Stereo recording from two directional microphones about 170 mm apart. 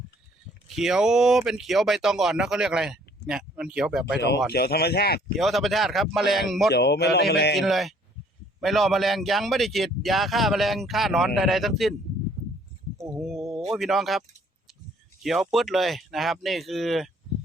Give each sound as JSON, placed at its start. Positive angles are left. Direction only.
{"t": 0.8, "sound": "speech", "side_deg": -5}
{"t": 4.2, "sound": "speech", "side_deg": 75}
{"t": 5.4, "sound": "speech", "side_deg": 0}
{"t": 6.7, "sound": "speech", "side_deg": 75}
{"t": 7.5, "sound": "speech", "side_deg": 0}
{"t": 13.1, "sound": "speech", "side_deg": 0}